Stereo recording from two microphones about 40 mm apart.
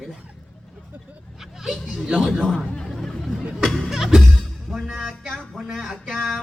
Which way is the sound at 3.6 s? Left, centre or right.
Centre.